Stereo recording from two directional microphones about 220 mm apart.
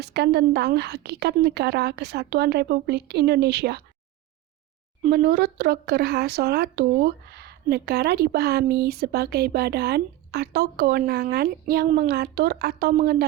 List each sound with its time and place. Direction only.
0.0 s a woman's voice: 50° right (ahead or behind)
5.1 s a woman's voice: 45° right (ahead or behind)